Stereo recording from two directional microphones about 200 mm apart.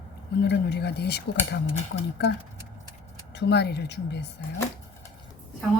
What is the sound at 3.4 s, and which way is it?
Speech, 55° left (ahead or behind).